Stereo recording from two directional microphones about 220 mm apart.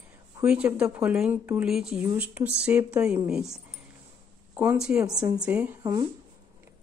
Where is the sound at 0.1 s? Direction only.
10° right (ahead or behind).